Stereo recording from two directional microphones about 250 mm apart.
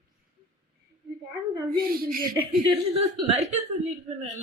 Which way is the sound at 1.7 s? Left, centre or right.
Right.